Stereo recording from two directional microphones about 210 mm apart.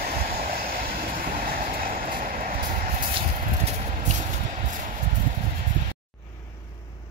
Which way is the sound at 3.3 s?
35° right (ahead or behind).